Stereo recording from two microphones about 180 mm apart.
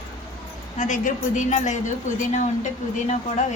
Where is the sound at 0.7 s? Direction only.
45° left (ahead or behind).